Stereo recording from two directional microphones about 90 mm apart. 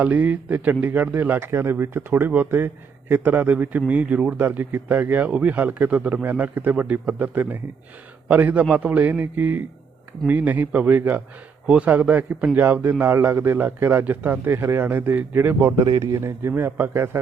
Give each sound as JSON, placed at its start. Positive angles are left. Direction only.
{"t": 0.0, "sound": "a man's voice", "side_deg": -20}
{"t": 15.6, "sound": "a man's voice", "side_deg": -35}